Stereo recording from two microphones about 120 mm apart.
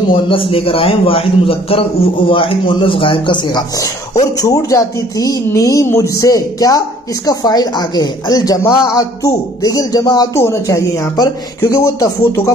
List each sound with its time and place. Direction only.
0.1 s a man's voice: 50° left (ahead or behind); by 12.4 s 25° left (ahead or behind)